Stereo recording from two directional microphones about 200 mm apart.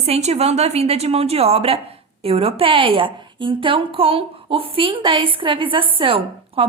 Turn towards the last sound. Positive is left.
turn(degrees=-25)  # may be behind; listen again after turning